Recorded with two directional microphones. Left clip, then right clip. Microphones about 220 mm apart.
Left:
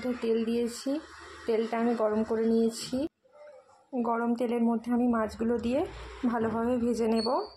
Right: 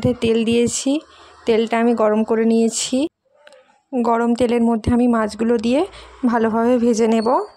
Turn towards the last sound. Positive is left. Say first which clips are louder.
# right 11 dB
turn(degrees=-40)  # may be behind; listen again after turning